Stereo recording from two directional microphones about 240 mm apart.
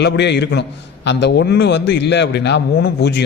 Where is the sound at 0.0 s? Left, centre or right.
Left.